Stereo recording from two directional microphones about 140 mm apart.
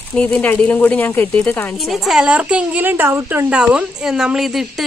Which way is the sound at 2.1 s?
5° right (ahead or behind).